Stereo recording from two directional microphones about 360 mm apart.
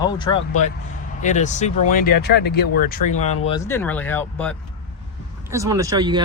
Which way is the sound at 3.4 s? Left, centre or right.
Centre.